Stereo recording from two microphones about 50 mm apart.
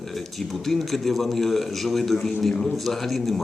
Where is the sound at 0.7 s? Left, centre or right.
Centre.